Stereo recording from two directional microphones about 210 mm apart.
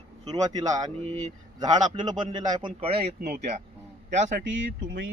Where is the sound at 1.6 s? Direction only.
20° right (ahead or behind); by 4.5 s 35° right (ahead or behind).